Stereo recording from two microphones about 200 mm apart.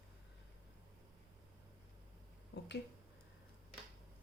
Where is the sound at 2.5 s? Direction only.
60° left (ahead or behind).